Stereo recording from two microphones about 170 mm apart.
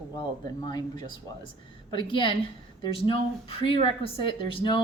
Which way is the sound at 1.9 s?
30° left (ahead or behind).